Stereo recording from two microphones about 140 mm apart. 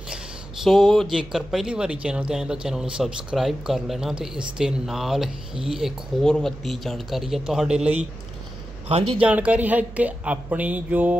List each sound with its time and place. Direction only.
0.7 s speech: centre (ahead or behind)
8.8 s speech: 45° right (ahead or behind)
9.2 s speech: 10° right (ahead or behind)